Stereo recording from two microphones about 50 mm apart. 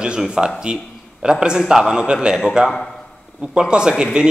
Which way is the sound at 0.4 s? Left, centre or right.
Centre.